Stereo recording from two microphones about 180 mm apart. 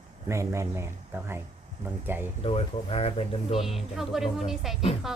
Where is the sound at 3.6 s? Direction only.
Centre (ahead or behind).